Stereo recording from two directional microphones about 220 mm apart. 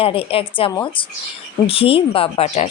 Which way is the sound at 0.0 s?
25° left (ahead or behind).